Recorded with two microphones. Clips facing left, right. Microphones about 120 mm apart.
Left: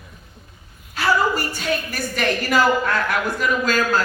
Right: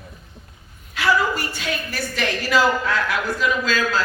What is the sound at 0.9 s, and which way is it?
A woman's voice, 40° left (ahead or behind).